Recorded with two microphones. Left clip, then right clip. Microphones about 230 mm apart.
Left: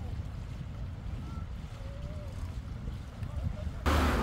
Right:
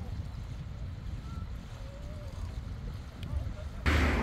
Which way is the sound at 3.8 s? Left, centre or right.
Left.